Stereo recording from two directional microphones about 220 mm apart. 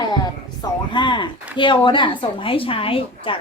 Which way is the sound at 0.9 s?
20° left (ahead or behind).